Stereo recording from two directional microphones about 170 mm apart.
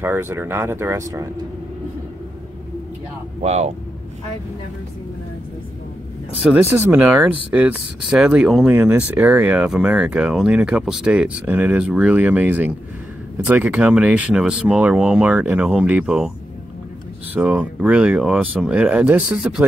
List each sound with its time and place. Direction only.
0.0 s speech: 15° right (ahead or behind)
3.4 s speech: 40° right (ahead or behind)
6.5 s speech: 15° right (ahead or behind)
17.3 s speech: 10° right (ahead or behind)